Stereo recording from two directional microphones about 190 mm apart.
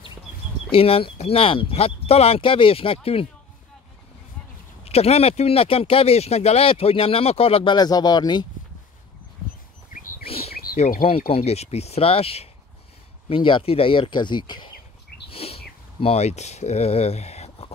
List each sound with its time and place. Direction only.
0.7 s speech: 30° left (ahead or behind)
4.8 s speech: 30° left (ahead or behind)
9.9 s bird: 45° left (ahead or behind)
10.2 s bird: 30° left (ahead or behind)
10.5 s wild animals: 50° left (ahead or behind)
11.1 s speech: 30° left (ahead or behind)
15.2 s bird: 30° left (ahead or behind)
16.0 s speech: 35° left (ahead or behind)